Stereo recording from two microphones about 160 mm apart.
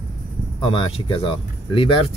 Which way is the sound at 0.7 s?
35° left (ahead or behind).